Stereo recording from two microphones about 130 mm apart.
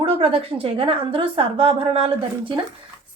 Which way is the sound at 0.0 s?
45° right (ahead or behind).